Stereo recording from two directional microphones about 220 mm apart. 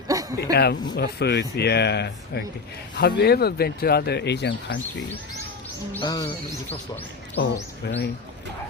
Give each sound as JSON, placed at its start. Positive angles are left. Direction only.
{"t": 0.1, "sound": "a sound", "side_deg": -15}
{"t": 0.5, "sound": "speech", "side_deg": 45}
{"t": 6.0, "sound": "speech", "side_deg": 15}
{"t": 7.4, "sound": "speech", "side_deg": 45}